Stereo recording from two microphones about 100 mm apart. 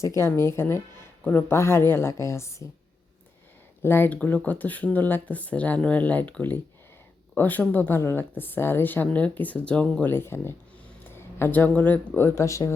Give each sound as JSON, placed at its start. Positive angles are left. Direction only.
{"t": 0.0, "sound": "speech", "side_deg": 30}
{"t": 3.8, "sound": "speech", "side_deg": 20}
{"t": 10.1, "sound": "speech", "side_deg": 25}